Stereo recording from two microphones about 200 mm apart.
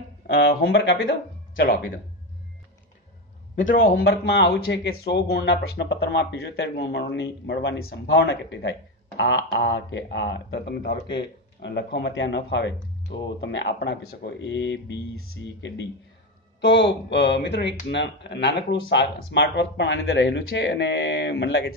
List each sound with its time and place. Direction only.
0.3 s speech: 50° left (ahead or behind)
3.7 s speech: 45° left (ahead or behind)